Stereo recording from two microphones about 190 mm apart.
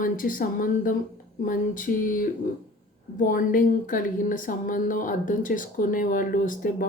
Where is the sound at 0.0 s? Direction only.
45° left (ahead or behind).